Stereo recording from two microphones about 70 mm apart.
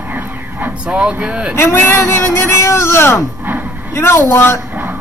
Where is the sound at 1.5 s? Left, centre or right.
Left.